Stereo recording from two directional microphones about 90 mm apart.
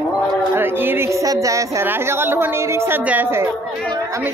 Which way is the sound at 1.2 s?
40° right (ahead or behind).